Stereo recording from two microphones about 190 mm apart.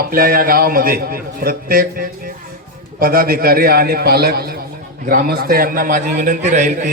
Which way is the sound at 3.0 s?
50° right (ahead or behind).